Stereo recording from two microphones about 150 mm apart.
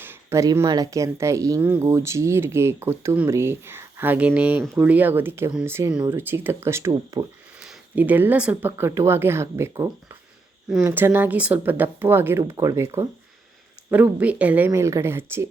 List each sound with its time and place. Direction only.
0.0 s speech: 15° right (ahead or behind)